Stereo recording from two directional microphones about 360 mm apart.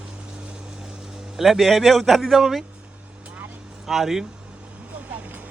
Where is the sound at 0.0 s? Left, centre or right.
Centre.